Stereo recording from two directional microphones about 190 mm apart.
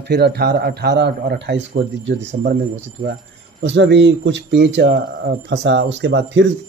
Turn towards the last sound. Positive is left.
turn(degrees=-70)  # may be behind; listen again after turning